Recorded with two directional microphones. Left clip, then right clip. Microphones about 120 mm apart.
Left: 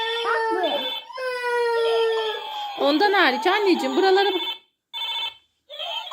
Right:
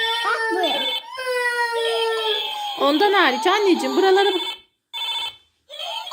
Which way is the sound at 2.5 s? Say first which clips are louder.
Right 2 dB; 10° left (ahead or behind).